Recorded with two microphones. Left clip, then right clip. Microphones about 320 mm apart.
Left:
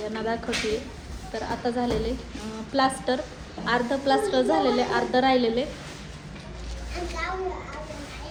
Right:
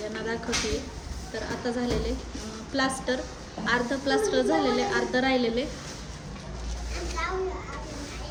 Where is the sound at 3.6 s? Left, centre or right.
Centre.